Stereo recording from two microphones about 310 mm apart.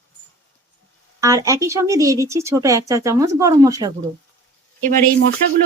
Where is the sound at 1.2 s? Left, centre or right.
Centre.